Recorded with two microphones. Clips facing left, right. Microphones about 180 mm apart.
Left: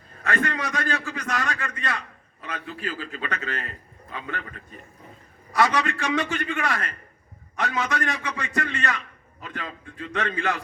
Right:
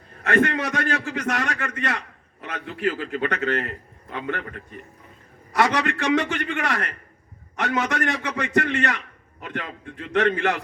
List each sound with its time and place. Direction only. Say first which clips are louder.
0.3 s a man's voice: right 7 dB; 65° right (ahead or behind)